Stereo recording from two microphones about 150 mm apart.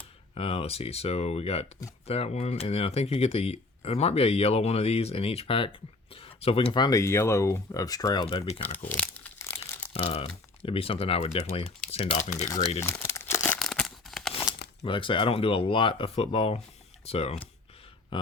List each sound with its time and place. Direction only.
0.3 s speech: 40° left (ahead or behind)
6.8 s speech: 20° left (ahead or behind)
8.6 s crumpling: 10° left (ahead or behind)
9.9 s speech: 40° left (ahead or behind)
12.8 s crumpling: 15° left (ahead or behind)
13.6 s tearing: 5° left (ahead or behind)
14.8 s speech: 35° left (ahead or behind)
18.1 s a sound: 30° left (ahead or behind)